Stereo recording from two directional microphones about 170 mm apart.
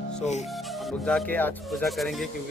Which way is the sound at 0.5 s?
Centre (ahead or behind).